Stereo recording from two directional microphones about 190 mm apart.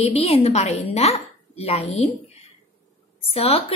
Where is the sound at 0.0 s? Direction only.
30° left (ahead or behind).